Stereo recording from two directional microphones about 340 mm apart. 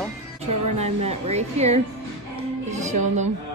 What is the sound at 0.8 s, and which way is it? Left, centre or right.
Speech, centre.